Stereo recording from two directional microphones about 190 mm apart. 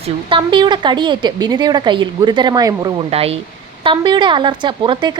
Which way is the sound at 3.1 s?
30° right (ahead or behind).